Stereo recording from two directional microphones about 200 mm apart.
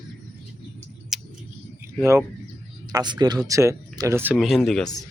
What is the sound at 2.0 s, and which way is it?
Speech, 15° right (ahead or behind).